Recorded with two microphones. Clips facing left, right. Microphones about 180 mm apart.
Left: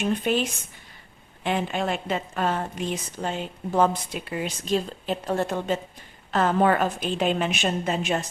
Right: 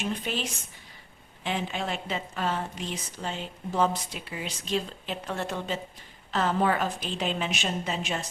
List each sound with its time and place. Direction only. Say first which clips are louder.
0.0 s a woman's voice: left 8 dB; 55° left (ahead or behind)
1.5 s a woman's voice: left 5 dB; 55° left (ahead or behind)